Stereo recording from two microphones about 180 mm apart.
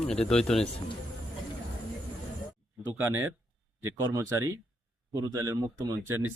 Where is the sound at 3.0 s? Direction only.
10° right (ahead or behind).